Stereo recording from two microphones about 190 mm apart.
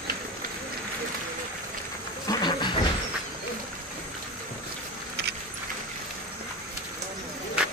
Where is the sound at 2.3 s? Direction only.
20° left (ahead or behind).